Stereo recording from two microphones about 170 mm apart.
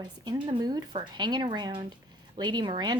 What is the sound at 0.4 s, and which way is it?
A woman's voice, 25° right (ahead or behind).